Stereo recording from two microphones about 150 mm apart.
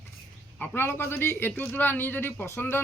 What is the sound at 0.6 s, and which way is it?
A man's voice, 15° left (ahead or behind).